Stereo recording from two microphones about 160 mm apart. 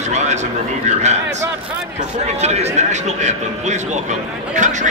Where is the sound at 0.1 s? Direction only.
45° right (ahead or behind).